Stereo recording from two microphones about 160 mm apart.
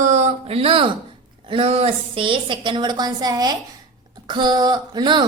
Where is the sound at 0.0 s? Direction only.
45° right (ahead or behind).